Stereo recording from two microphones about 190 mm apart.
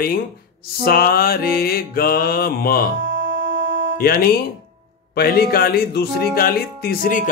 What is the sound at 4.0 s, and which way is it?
Speech, 55° left (ahead or behind).